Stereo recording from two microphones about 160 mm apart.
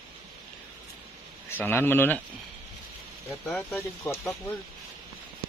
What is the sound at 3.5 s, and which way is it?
Speech, 5° left (ahead or behind).